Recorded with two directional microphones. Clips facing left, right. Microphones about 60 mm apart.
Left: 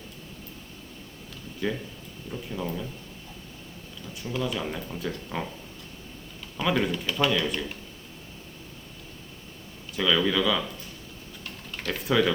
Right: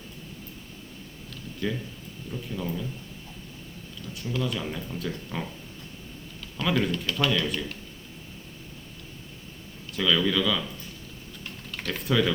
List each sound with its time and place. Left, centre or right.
1.6 s speech: centre
4.3 s speech: centre
6.6 s speech: centre
9.9 s speech: centre
11.7 s speech: centre